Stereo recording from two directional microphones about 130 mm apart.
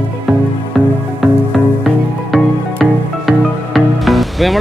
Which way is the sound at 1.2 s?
Centre (ahead or behind).